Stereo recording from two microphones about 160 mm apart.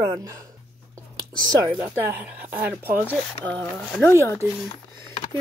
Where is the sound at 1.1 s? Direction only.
25° right (ahead or behind).